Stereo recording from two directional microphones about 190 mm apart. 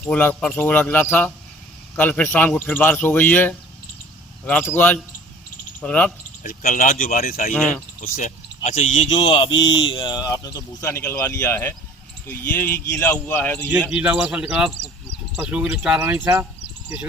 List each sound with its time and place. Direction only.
0.0 s speech: 10° left (ahead or behind)
6.4 s speech: 45° left (ahead or behind)
7.5 s speech: 10° left (ahead or behind)
8.0 s speech: 45° left (ahead or behind); by 13.7 s 10° left (ahead or behind)
13.9 s speech: 5° right (ahead or behind)